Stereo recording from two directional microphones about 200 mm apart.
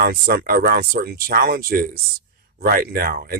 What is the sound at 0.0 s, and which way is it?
Speech, 50° right (ahead or behind).